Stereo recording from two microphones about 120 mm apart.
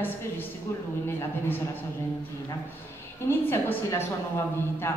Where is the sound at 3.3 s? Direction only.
20° left (ahead or behind).